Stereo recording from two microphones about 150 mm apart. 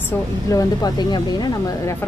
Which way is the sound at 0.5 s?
25° left (ahead or behind).